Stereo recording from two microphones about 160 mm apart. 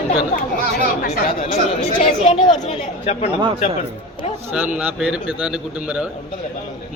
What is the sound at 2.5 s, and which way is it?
Speech, 40° left (ahead or behind).